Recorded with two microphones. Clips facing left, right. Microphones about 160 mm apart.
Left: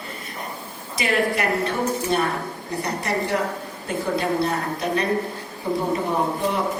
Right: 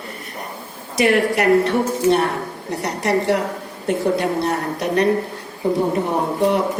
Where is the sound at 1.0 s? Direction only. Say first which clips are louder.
Right 6 dB; 70° right (ahead or behind).